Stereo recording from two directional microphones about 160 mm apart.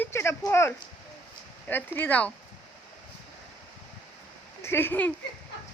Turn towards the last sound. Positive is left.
turn(degrees=10)  # may be behind; listen again after turning